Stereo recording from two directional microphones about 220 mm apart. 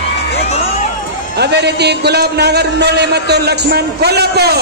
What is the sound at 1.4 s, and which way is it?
A man's voice, 50° right (ahead or behind).